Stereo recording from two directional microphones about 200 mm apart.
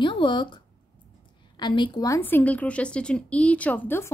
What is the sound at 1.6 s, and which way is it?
Speech, 25° left (ahead or behind).